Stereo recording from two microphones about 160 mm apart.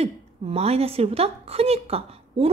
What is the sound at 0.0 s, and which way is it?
A woman's voice, 40° right (ahead or behind).